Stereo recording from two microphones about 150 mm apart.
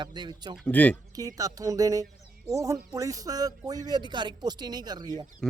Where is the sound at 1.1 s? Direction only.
25° right (ahead or behind).